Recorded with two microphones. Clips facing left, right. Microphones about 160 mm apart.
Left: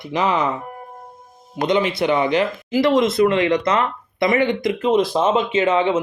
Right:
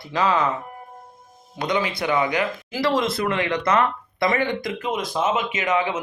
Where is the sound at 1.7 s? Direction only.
25° left (ahead or behind).